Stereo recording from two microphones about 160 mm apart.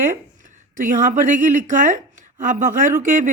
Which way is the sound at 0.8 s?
55° right (ahead or behind).